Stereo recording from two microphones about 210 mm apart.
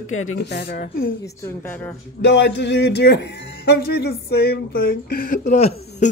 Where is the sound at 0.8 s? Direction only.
45° left (ahead or behind).